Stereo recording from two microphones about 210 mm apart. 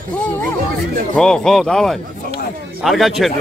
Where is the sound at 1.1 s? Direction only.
Centre (ahead or behind).